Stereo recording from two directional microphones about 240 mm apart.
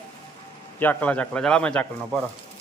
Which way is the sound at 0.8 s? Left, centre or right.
Centre.